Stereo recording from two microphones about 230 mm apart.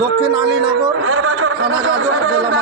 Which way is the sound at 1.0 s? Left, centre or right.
Right.